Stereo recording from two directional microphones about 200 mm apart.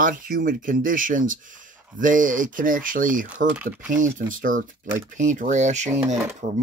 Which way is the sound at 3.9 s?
40° right (ahead or behind).